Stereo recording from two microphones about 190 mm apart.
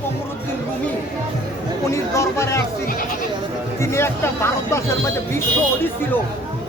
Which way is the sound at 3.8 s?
15° left (ahead or behind).